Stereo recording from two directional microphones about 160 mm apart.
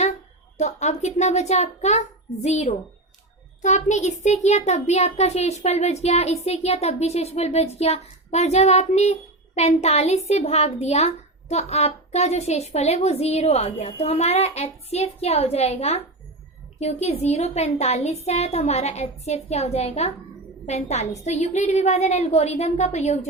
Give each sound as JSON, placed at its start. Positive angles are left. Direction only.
{"t": 0.0, "sound": "a woman's voice", "side_deg": 45}